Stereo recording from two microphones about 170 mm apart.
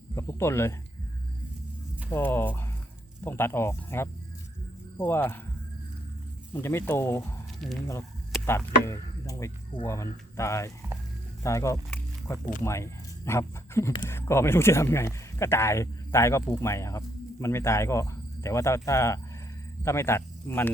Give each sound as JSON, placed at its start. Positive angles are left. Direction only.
{"t": 0.1, "sound": "a sound", "side_deg": 15}
{"t": 2.0, "sound": "speech", "side_deg": 15}
{"t": 6.5, "sound": "speech", "side_deg": 15}
{"t": 8.4, "sound": "speech", "side_deg": 15}